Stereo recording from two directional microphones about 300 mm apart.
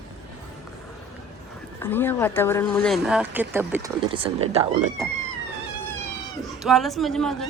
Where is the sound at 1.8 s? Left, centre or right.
Centre; by 4.9 s right.